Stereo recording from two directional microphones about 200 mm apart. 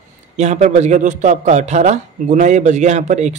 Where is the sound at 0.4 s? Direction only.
35° right (ahead or behind).